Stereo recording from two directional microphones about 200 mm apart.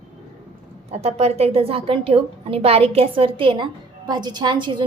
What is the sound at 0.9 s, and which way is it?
A woman's voice, 30° right (ahead or behind).